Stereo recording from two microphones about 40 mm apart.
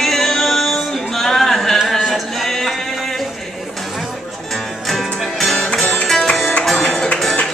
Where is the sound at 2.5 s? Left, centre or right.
Centre.